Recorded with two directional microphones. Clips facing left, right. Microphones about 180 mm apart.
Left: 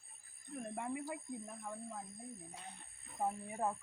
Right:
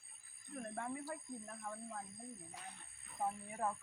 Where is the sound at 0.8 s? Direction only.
10° left (ahead or behind).